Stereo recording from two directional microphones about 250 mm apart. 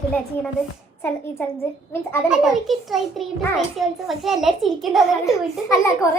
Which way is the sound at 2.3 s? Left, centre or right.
Centre.